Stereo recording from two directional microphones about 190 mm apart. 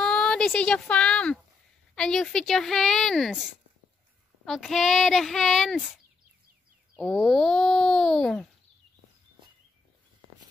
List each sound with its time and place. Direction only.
0.0 s speech: 5° left (ahead or behind)
4.5 s speech: centre (ahead or behind)
7.0 s speech: 5° left (ahead or behind)